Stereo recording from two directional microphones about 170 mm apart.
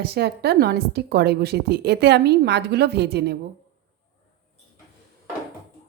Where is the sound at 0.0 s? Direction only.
70° right (ahead or behind).